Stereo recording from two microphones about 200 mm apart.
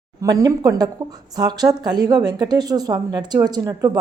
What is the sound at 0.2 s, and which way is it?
A woman's voice, 15° right (ahead or behind).